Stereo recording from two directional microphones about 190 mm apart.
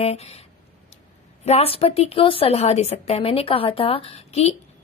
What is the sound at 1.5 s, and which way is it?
A woman's voice, 30° left (ahead or behind).